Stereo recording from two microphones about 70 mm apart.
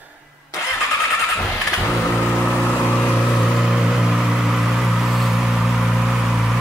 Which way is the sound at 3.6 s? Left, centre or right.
Centre.